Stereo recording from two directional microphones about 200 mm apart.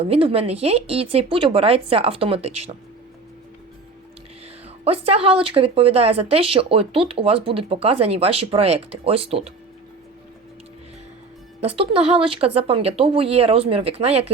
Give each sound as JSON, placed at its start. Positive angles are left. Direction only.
{"t": 0.0, "sound": "speech", "side_deg": -30}
{"t": 4.9, "sound": "speech", "side_deg": -30}
{"t": 11.8, "sound": "speech", "side_deg": -30}